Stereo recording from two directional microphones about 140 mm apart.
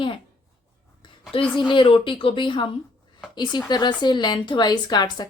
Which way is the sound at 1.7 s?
35° left (ahead or behind).